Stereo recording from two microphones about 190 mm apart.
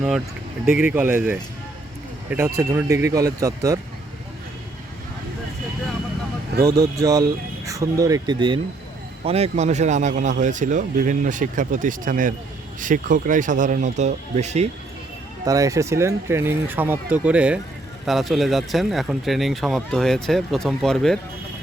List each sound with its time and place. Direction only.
0.6 s speech: 5° right (ahead or behind)
6.7 s speech: 20° right (ahead or behind); by 14.7 s 35° right (ahead or behind)
15.4 s speech: 15° right (ahead or behind); by 21.2 s centre (ahead or behind)